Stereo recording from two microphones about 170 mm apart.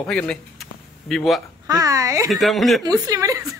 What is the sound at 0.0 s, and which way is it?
A man's voice, 5° left (ahead or behind).